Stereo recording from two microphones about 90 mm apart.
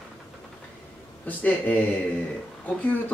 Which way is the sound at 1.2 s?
15° left (ahead or behind).